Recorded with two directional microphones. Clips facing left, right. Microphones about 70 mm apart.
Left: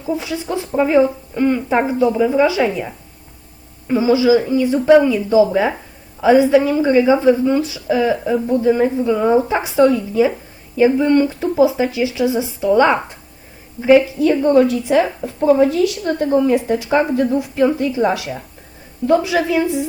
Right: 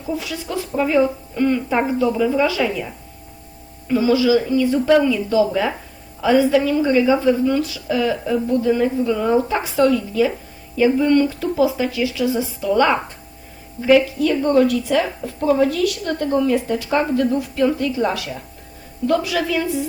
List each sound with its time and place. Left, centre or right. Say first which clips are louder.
0.1 s a woman's voice: left 4 dB; left